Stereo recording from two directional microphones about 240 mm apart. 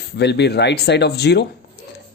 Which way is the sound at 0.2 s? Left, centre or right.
Left.